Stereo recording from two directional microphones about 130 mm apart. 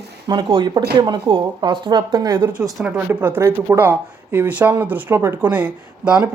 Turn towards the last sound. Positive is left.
turn(degrees=-10)  # may be behind; listen again after turning